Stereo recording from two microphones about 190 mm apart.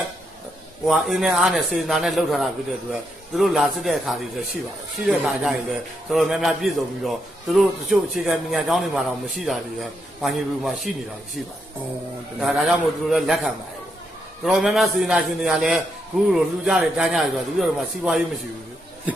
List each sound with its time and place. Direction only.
0.8 s a man's voice: centre (ahead or behind)
12.4 s a man's voice: centre (ahead or behind)